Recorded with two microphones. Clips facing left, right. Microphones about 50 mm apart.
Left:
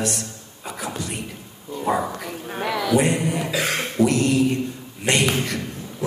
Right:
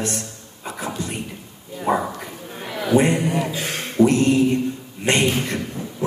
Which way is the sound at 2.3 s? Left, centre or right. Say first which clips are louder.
Left 5 dB; left.